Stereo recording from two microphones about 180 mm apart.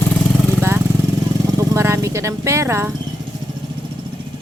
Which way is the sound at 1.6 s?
15° right (ahead or behind).